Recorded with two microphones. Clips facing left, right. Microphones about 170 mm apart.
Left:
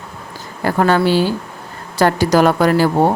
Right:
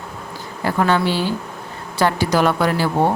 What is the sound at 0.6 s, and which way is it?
Speech, 45° left (ahead or behind).